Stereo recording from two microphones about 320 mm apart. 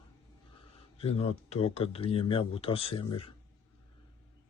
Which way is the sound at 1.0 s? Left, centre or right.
Centre.